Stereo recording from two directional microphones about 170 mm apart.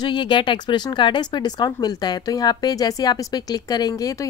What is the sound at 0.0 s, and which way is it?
A woman's voice, 25° left (ahead or behind).